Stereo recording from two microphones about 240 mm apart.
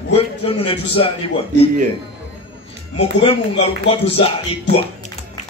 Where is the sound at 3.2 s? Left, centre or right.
Left.